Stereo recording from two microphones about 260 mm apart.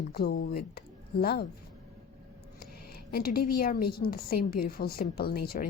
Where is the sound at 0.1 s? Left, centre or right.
Left.